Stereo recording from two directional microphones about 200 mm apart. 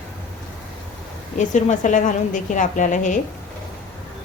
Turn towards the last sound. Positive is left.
turn(degrees=40)  # may be behind; listen again after turning